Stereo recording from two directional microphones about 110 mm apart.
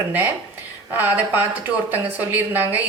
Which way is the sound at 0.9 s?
15° right (ahead or behind).